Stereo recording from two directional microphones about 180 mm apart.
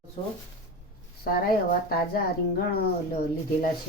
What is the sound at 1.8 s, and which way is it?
Speech, 55° left (ahead or behind).